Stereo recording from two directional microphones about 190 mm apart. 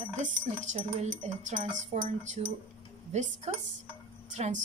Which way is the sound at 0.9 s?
40° right (ahead or behind).